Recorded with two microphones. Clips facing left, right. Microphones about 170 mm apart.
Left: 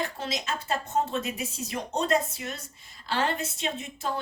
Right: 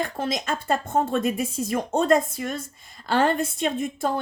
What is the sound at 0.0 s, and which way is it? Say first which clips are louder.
Speech: right 5 dB; 50° right (ahead or behind).